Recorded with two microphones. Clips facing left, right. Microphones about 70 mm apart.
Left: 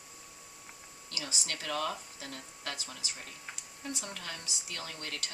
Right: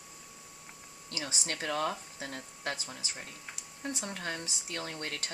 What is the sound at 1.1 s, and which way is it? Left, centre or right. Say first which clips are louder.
Speech: right 2 dB; right.